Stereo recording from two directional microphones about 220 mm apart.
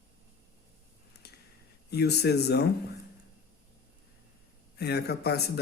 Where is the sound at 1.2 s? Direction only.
45° left (ahead or behind).